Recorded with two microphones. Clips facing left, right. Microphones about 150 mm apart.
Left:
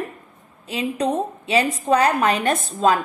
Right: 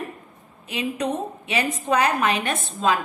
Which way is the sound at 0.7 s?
35° left (ahead or behind).